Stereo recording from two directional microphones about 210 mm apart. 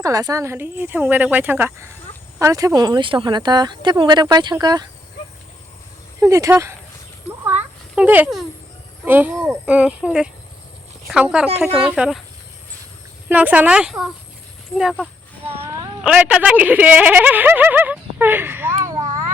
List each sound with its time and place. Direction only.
0.0 s speech: 15° right (ahead or behind)
6.1 s speech: 15° right (ahead or behind)
7.4 s a sound: 10° right (ahead or behind)
9.0 s speech: 10° right (ahead or behind)
13.2 s speech: 5° right (ahead or behind)